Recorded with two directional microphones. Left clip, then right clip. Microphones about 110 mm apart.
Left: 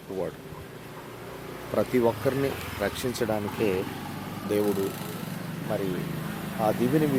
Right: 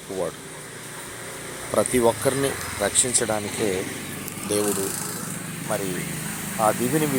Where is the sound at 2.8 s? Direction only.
15° left (ahead or behind).